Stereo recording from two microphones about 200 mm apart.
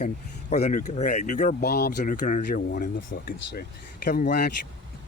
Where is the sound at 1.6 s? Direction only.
55° left (ahead or behind).